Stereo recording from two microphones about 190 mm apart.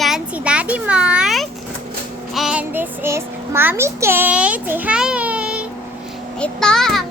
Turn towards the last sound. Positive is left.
turn(degrees=0)  # may be behind; listen again after turning